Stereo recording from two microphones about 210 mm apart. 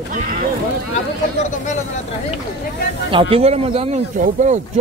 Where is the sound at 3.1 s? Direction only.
25° right (ahead or behind).